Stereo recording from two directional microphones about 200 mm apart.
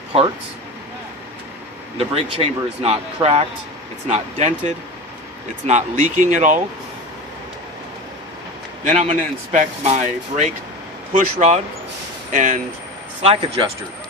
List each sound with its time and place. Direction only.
2.0 s speech: 30° right (ahead or behind)
8.8 s speech: 35° right (ahead or behind)
13.2 s speech: 30° right (ahead or behind)